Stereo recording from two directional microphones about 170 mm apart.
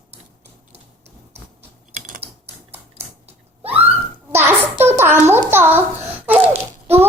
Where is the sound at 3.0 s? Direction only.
40° right (ahead or behind).